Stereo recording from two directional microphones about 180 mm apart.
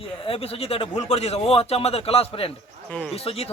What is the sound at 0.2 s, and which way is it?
A man's voice, 30° left (ahead or behind).